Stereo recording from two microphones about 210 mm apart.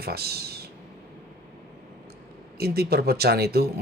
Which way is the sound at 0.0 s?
50° right (ahead or behind).